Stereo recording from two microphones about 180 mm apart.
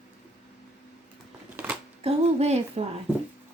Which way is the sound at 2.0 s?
35° right (ahead or behind).